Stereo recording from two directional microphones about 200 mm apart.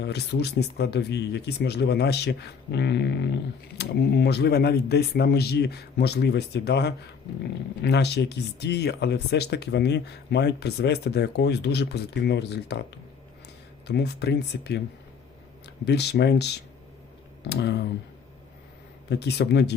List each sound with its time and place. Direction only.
0.0 s speech: 55° left (ahead or behind)
13.8 s speech: 55° left (ahead or behind)
19.0 s speech: 55° left (ahead or behind)